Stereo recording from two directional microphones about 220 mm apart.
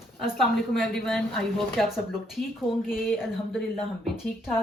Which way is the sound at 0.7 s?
Centre (ahead or behind).